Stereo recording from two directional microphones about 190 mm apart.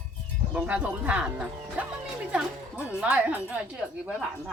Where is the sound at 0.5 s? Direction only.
10° right (ahead or behind).